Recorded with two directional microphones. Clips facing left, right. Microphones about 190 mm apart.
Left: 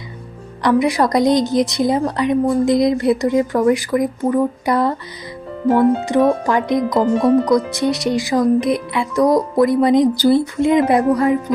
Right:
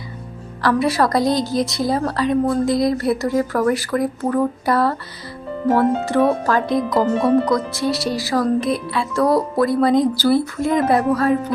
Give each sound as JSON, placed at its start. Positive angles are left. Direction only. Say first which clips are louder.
{"t": 0.6, "sound": "a woman's voice", "louder": "left 2 dB", "side_deg": 15}
{"t": 6.9, "sound": "speech", "louder": "left 2 dB", "side_deg": -5}
{"t": 7.5, "sound": "a woman's voice", "louder": "left 4 dB", "side_deg": 20}